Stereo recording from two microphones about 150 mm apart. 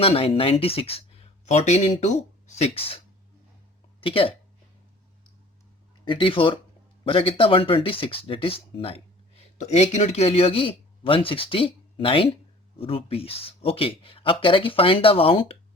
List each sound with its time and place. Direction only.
0.0 s speech: 40° left (ahead or behind)
4.0 s speech: 40° left (ahead or behind)
6.1 s speech: 35° left (ahead or behind)